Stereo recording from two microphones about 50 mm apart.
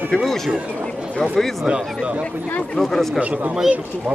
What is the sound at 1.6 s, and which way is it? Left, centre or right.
Speech, centre.